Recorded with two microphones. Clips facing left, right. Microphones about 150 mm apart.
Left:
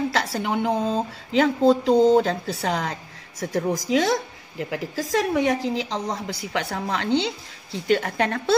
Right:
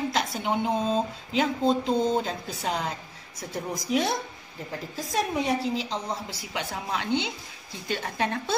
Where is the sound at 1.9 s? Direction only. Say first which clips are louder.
Left 8 dB; 85° left.